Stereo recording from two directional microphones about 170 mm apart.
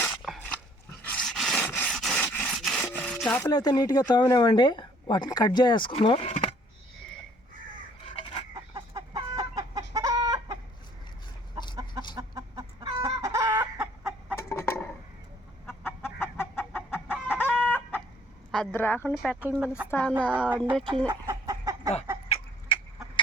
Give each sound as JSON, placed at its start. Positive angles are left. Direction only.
{"t": 0.0, "sound": "dog", "side_deg": 5}
{"t": 2.2, "sound": "scratch", "side_deg": 10}
{"t": 2.5, "sound": "rub", "side_deg": 0}
{"t": 3.4, "sound": "speech", "side_deg": 25}
{"t": 8.5, "sound": "chicken", "side_deg": -20}
{"t": 12.1, "sound": "chicken", "side_deg": -20}
{"t": 13.7, "sound": "chicken", "side_deg": -5}
{"t": 14.3, "sound": "chicken", "side_deg": 15}
{"t": 18.5, "sound": "a woman's voice", "side_deg": 10}
{"t": 19.4, "sound": "a woman's voice", "side_deg": -5}
{"t": 19.9, "sound": "speech", "side_deg": 10}
{"t": 21.1, "sound": "chicken", "side_deg": -15}